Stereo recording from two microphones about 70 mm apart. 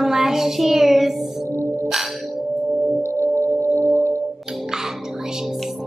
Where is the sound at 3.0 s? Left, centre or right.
Right.